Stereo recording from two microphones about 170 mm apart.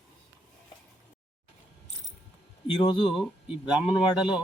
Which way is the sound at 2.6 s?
25° left (ahead or behind).